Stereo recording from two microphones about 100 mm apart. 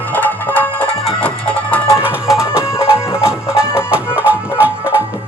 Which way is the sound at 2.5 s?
30° left (ahead or behind).